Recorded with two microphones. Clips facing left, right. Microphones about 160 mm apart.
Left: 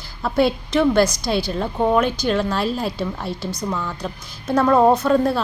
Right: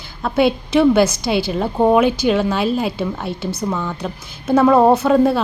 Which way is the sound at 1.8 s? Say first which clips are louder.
Right 4 dB; 20° right (ahead or behind).